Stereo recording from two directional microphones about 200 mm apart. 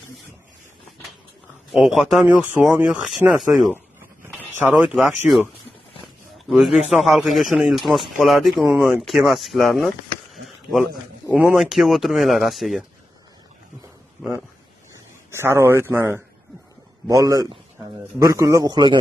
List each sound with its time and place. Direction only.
1.7 s speech: centre (ahead or behind)
6.4 s a sound: centre (ahead or behind)
6.9 s speech: centre (ahead or behind)
10.3 s a sound: centre (ahead or behind)
11.3 s speech: 5° right (ahead or behind)
15.3 s a man's voice: 15° right (ahead or behind)